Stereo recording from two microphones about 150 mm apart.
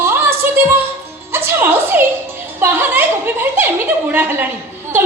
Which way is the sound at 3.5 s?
10° right (ahead or behind).